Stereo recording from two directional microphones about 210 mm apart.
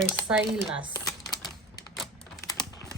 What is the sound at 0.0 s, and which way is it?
Speech, 5° right (ahead or behind).